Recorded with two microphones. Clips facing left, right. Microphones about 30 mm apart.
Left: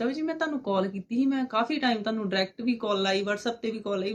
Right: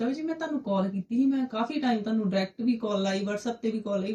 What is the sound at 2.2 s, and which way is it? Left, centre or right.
Speech, left.